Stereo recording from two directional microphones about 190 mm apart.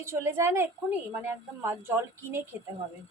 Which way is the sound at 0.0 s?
15° right (ahead or behind).